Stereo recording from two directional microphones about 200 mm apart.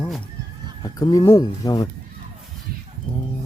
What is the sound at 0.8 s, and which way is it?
Speech, 20° left (ahead or behind).